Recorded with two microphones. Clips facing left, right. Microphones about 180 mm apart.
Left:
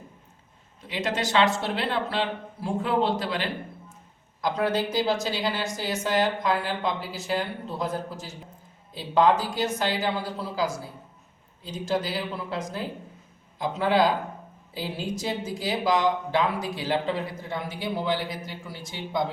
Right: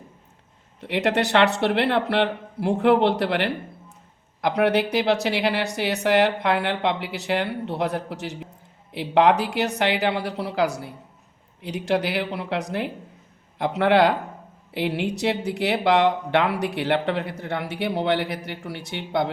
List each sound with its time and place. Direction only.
0.8 s speech: 65° right (ahead or behind)